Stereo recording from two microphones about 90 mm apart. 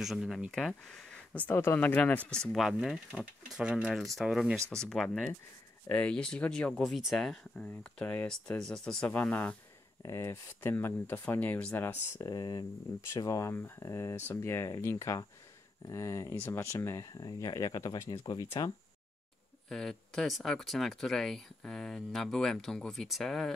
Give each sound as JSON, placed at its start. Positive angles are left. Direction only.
{"t": 0.0, "sound": "speech", "side_deg": 0}
{"t": 1.3, "sound": "speech", "side_deg": 15}
{"t": 2.6, "sound": "speech", "side_deg": 0}
{"t": 6.8, "sound": "speech", "side_deg": 0}
{"t": 9.1, "sound": "speech", "side_deg": 20}
{"t": 10.0, "sound": "speech", "side_deg": 35}
{"t": 12.2, "sound": "speech", "side_deg": 45}
{"t": 13.1, "sound": "speech", "side_deg": 35}
{"t": 17.1, "sound": "speech", "side_deg": 45}
{"t": 19.7, "sound": "speech", "side_deg": 5}